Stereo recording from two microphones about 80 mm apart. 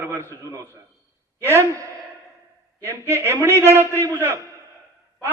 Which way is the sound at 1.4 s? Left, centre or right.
Right.